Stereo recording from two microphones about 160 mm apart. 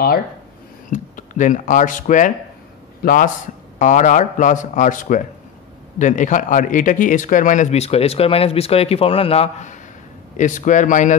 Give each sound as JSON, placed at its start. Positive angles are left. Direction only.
{"t": 0.8, "sound": "speech", "side_deg": 55}
{"t": 3.0, "sound": "a man's voice", "side_deg": 65}
{"t": 3.8, "sound": "speech", "side_deg": 50}